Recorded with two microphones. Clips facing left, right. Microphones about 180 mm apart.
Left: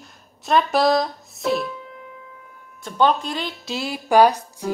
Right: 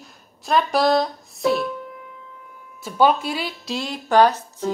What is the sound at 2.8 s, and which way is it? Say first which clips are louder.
Speech: right 1 dB; 5° right (ahead or behind).